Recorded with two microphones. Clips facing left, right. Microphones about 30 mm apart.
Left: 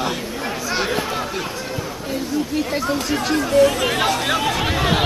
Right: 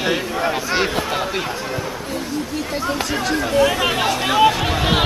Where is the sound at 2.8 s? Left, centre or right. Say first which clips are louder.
Even; centre.